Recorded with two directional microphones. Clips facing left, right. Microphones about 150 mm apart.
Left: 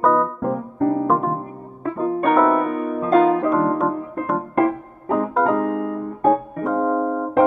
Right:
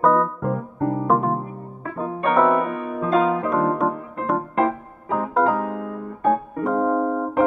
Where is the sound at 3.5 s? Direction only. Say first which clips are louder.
Left 2 dB; centre (ahead or behind).